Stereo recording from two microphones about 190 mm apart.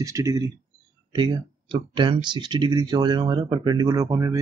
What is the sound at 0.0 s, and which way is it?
Speech, 15° right (ahead or behind).